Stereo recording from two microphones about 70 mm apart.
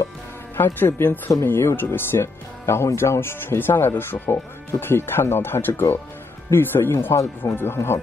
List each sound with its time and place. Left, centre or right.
0.7 s a man's voice: left